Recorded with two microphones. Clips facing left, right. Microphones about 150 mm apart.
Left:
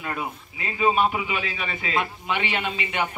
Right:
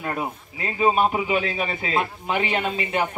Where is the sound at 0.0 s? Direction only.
40° right (ahead or behind).